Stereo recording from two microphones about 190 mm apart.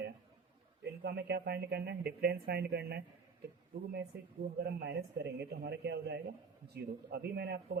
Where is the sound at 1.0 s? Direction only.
60° right (ahead or behind).